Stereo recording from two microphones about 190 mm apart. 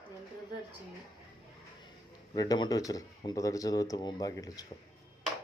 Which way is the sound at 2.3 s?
20° left (ahead or behind).